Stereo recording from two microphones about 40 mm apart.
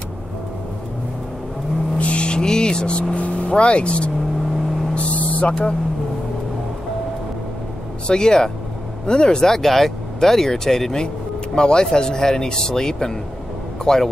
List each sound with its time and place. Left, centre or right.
2.0 s vehicle: left
4.9 s a sound: left
5.5 s speech: left
8.1 s speech: centre